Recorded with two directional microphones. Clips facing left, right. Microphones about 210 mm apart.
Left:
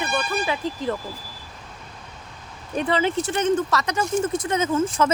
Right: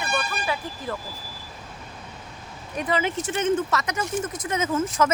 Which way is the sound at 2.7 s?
30° left (ahead or behind).